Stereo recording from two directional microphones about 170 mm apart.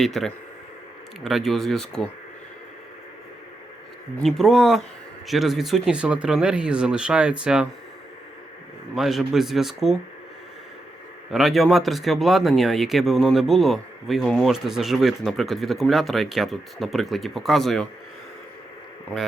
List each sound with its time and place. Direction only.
0.0 s speech: centre (ahead or behind)
4.2 s speech: centre (ahead or behind)
9.0 s speech: centre (ahead or behind)
11.3 s speech: centre (ahead or behind)